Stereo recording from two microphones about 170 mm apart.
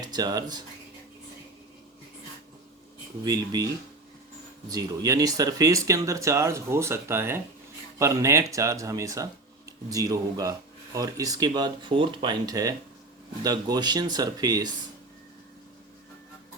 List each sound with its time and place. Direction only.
0.0 s speech: 25° right (ahead or behind)
3.2 s speech: 20° right (ahead or behind)
4.7 s speech: 20° right (ahead or behind)